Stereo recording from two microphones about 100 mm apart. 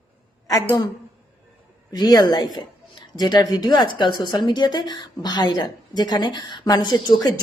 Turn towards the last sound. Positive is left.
turn(degrees=40)  # may be behind; listen again after turning